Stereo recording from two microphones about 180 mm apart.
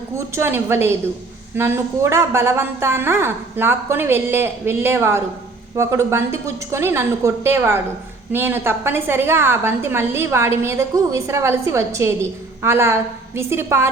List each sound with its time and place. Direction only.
0.3 s a woman's voice: 15° right (ahead or behind)